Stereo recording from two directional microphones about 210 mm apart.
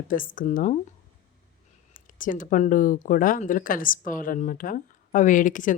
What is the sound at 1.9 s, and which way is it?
Speech, 40° left (ahead or behind).